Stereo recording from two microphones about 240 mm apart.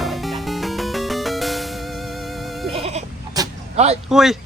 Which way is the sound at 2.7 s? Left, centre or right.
Right.